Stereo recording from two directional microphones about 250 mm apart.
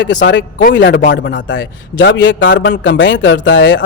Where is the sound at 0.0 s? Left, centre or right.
Left.